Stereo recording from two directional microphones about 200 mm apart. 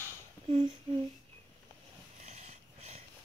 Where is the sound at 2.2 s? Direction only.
35° right (ahead or behind).